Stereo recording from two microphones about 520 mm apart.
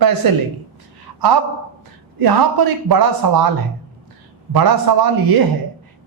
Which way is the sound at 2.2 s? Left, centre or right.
Right.